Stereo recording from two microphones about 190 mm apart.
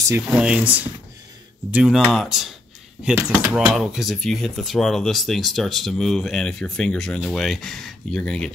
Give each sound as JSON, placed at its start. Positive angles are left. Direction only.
{"t": 0.1, "sound": "speech", "side_deg": -5}